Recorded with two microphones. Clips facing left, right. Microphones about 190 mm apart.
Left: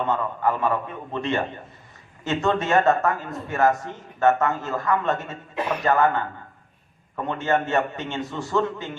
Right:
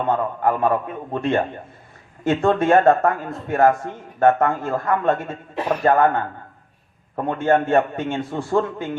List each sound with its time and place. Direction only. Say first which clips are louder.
0.1 s a man's voice: right 3 dB; 50° right (ahead or behind)